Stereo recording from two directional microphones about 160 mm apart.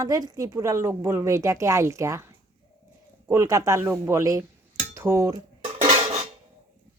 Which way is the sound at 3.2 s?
15° right (ahead or behind).